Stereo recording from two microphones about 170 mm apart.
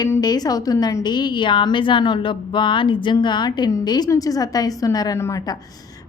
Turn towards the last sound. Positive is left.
turn(degrees=20)  # may be behind; listen again after turning